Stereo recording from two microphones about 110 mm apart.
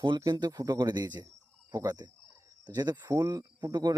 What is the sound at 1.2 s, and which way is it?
Cricket, 35° right (ahead or behind).